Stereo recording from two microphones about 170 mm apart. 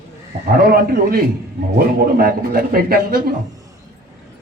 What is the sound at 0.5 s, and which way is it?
A man's voice, 60° right (ahead or behind).